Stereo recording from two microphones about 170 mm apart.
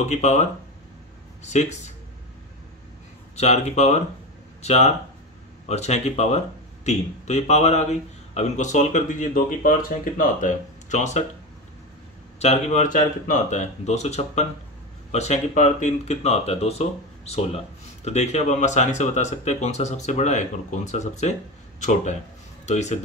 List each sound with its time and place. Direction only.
0.0 s speech: 45° left (ahead or behind)
3.3 s speech: 40° left (ahead or behind)
12.4 s speech: 40° left (ahead or behind)